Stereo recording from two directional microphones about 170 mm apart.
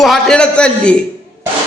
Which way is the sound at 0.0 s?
Centre (ahead or behind).